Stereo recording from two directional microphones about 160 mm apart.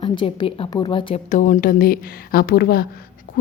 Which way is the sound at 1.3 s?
55° left (ahead or behind).